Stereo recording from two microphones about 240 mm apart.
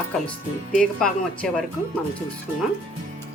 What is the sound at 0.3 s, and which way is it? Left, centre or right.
Speech, centre.